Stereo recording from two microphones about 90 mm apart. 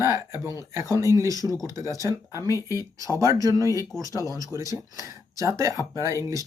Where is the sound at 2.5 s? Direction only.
40° left (ahead or behind).